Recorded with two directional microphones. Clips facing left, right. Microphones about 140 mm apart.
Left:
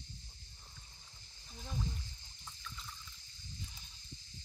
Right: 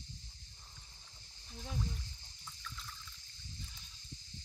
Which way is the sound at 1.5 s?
Centre (ahead or behind).